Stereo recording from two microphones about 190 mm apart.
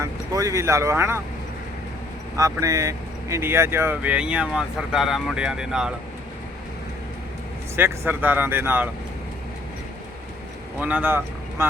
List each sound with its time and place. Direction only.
0.0 s speech: 15° right (ahead or behind)
2.4 s speech: 15° right (ahead or behind)
7.8 s speech: 10° right (ahead or behind)
10.8 s speech: 10° right (ahead or behind)